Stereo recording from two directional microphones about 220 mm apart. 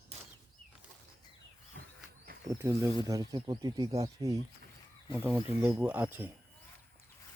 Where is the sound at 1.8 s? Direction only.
50° right (ahead or behind).